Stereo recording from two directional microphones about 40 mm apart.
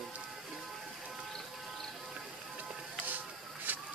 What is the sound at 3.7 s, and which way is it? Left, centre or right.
Duck, right.